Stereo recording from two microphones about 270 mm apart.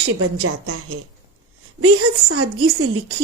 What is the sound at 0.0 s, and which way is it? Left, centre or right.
Speech, right.